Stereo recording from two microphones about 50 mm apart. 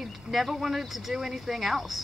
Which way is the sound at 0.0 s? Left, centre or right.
Centre.